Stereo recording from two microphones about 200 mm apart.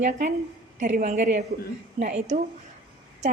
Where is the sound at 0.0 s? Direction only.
40° right (ahead or behind).